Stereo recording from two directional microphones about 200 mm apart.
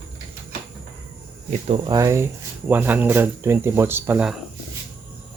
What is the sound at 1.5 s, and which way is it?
Speech, 30° right (ahead or behind).